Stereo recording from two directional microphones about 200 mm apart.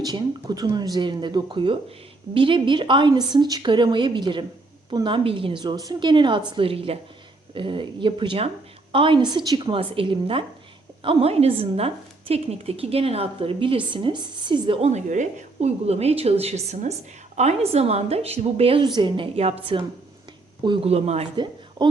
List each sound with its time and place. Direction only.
0.0 s a woman's voice: 20° right (ahead or behind)